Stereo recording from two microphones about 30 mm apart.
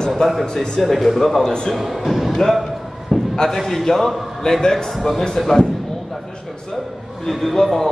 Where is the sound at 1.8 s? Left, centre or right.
Centre.